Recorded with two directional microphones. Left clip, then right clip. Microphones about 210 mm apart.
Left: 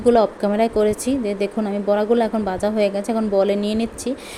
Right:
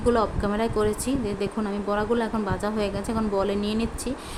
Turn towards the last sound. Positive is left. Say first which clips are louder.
# left 5 dB
turn(degrees=15)  # may be behind; listen again after turning